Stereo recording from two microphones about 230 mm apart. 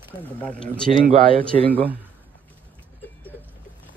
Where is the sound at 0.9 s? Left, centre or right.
Right.